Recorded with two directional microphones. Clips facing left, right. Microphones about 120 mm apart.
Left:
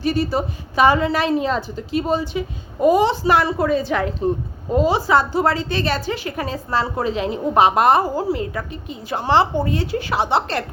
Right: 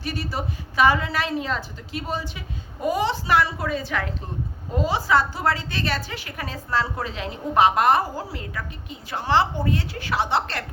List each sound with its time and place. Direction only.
0.0 s a woman's voice: 25° left (ahead or behind)